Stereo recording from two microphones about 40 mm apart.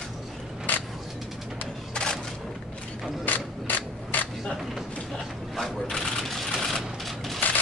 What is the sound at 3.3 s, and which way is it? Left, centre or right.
Mechanisms, left.